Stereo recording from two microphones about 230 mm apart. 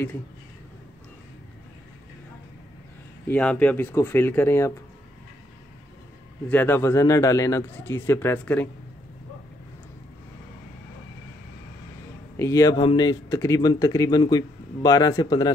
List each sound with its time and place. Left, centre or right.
3.3 s speech: centre
6.5 s speech: centre
12.4 s speech: centre